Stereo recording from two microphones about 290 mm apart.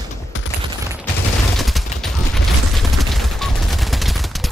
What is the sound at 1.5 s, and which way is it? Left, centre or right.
Mechanisms, centre.